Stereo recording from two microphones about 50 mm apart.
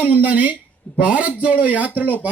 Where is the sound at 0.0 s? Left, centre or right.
Right.